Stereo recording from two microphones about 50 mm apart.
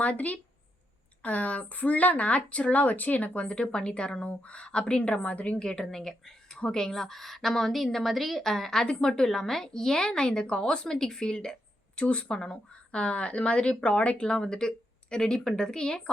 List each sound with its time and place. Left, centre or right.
0.0 s speech: left
5.5 s a woman's voice: centre
14.3 s a woman's voice: centre